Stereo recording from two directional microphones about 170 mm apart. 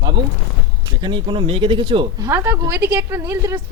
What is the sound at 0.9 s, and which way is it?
A woman's voice, 25° right (ahead or behind).